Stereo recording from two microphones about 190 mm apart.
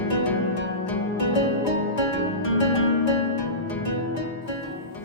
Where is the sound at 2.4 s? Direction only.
90° left.